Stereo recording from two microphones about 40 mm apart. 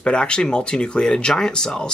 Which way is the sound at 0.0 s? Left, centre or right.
Left.